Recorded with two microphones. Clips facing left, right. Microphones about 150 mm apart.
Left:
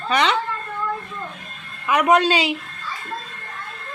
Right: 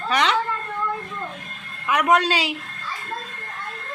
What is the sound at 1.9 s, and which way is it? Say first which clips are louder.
Speech: left 2 dB; centre (ahead or behind).